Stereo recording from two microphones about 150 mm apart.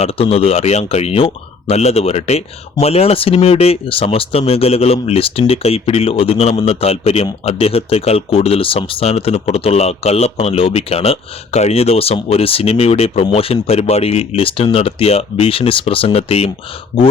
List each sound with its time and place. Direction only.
0.0 s speech: 40° left (ahead or behind)